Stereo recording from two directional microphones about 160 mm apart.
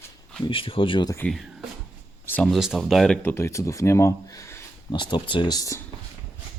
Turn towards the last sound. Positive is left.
turn(degrees=20)  # may be behind; listen again after turning